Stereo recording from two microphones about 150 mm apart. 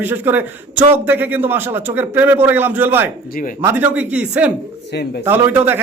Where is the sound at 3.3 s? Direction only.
65° left (ahead or behind).